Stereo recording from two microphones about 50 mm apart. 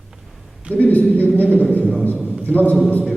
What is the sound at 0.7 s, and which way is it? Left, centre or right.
A man's voice, left.